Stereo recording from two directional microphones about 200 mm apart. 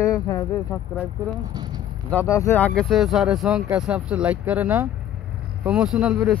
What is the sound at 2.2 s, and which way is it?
Speech, 15° left (ahead or behind).